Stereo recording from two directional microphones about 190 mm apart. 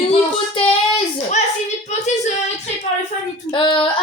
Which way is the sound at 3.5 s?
25° left (ahead or behind).